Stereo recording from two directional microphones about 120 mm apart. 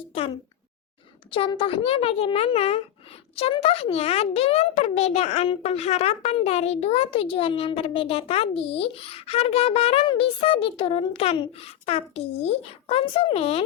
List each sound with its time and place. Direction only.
1.3 s a child's voice: 45° left (ahead or behind)